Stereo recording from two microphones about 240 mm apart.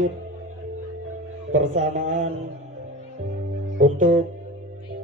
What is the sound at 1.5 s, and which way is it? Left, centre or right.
Speech, right.